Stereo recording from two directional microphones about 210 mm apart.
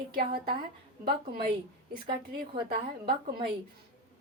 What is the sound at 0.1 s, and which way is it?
Speech, 45° right (ahead or behind).